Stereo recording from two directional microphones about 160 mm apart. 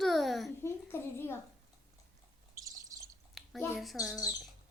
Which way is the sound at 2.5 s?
20° right (ahead or behind).